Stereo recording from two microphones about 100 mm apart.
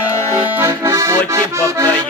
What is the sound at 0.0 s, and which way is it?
Accordion, 20° right (ahead or behind).